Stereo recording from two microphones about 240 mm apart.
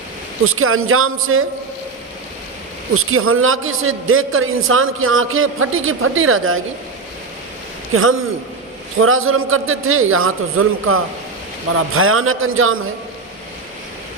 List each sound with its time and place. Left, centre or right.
0.4 s a man's voice: right
2.9 s a man's voice: right
7.9 s a man's voice: right